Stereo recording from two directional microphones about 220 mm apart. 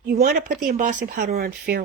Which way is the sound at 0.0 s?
45° right (ahead or behind).